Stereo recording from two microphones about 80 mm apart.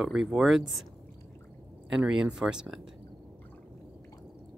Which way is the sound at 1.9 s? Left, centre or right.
Centre.